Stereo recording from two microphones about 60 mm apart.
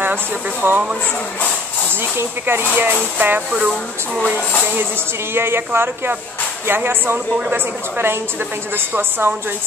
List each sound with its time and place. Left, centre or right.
0.0 s speech: right
2.1 s speech: right
2.7 s speech: right
5.3 s speech: right